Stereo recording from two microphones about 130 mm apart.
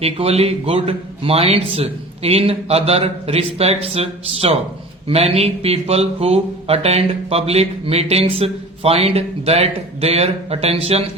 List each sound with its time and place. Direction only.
0.0 s speech: 50° right (ahead or behind)